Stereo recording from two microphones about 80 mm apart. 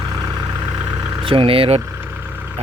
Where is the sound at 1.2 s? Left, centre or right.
Right.